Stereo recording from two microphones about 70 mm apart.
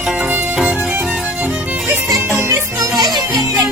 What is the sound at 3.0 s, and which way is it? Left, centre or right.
Music, right.